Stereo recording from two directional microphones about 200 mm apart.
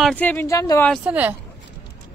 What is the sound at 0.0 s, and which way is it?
Speech, 5° left (ahead or behind).